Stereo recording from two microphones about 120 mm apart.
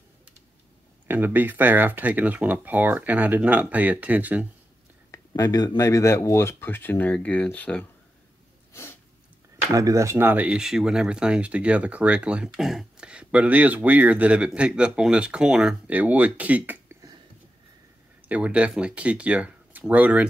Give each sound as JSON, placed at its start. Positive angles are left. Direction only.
{"t": 1.0, "sound": "speech", "side_deg": -15}
{"t": 5.1, "sound": "speech", "side_deg": 30}
{"t": 9.7, "sound": "speech", "side_deg": -25}
{"t": 18.3, "sound": "speech", "side_deg": -10}